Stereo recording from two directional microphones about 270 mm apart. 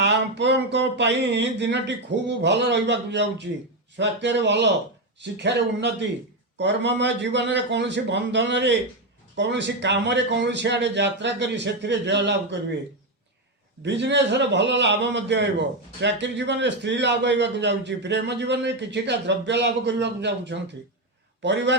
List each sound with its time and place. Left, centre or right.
0.0 s a man's voice: right
13.8 s a man's voice: right